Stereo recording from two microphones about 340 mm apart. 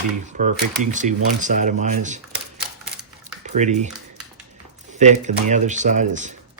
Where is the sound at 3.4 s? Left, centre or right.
Right.